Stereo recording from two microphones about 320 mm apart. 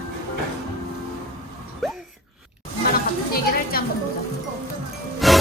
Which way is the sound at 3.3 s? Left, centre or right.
Left.